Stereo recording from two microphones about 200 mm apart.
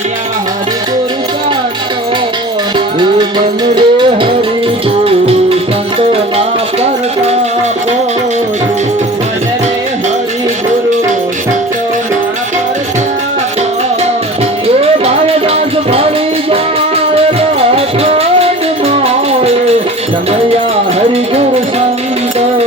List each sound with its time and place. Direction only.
3.8 s music: 25° right (ahead or behind)
14.9 s music: 30° right (ahead or behind)
17.7 s music: 30° right (ahead or behind)